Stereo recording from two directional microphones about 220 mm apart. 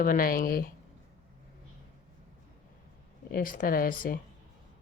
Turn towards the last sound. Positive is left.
turn(degrees=40)  # may be behind; listen again after turning